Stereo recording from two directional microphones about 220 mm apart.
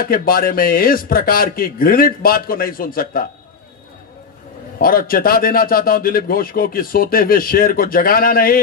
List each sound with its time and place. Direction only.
0.0 s a man's voice: 40° left (ahead or behind)
4.7 s a man's voice: 40° left (ahead or behind)